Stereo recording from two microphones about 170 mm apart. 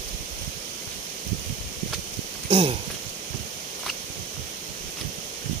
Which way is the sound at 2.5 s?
30° right (ahead or behind).